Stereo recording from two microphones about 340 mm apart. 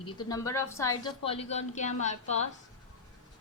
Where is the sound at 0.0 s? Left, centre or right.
Centre.